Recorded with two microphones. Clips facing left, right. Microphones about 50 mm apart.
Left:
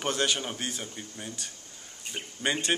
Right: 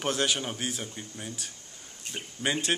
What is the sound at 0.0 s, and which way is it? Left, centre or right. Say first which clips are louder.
A man's voice: even; centre.